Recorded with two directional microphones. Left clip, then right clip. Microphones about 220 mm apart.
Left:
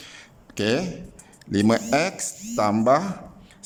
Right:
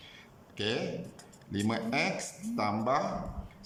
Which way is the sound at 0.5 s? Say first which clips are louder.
Left 9 dB; 55° left (ahead or behind).